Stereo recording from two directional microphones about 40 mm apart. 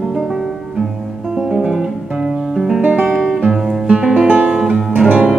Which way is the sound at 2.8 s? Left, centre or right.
Right.